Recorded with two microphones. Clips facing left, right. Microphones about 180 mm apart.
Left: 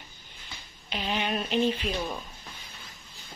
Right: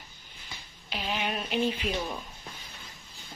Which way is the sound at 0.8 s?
5° right (ahead or behind).